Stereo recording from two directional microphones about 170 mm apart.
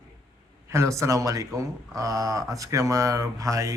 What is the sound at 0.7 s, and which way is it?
Speech, 15° right (ahead or behind).